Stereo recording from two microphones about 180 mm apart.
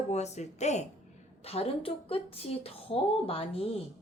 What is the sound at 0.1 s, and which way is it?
Speech, 40° left (ahead or behind).